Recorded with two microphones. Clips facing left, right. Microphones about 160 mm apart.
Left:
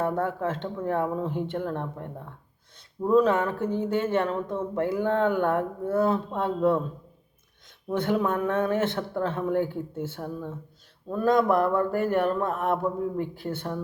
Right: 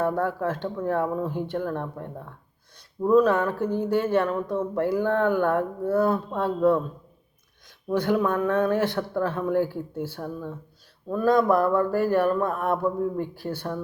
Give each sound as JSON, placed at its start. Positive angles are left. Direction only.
{"t": 0.0, "sound": "speech", "side_deg": 25}
{"t": 7.9, "sound": "speech", "side_deg": 25}